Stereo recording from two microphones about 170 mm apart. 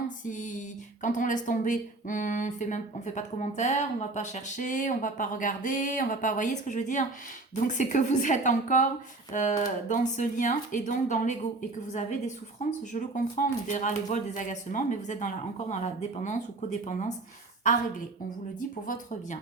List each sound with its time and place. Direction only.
0.3 s speech: 45° left (ahead or behind)
12.9 s speech: 45° left (ahead or behind)